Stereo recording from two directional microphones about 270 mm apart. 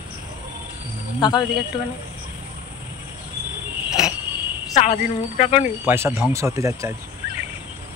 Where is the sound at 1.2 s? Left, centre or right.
Centre.